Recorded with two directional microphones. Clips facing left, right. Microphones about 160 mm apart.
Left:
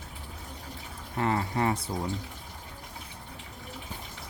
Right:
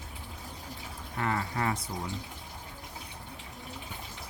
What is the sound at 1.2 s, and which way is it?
Speech, 25° left (ahead or behind).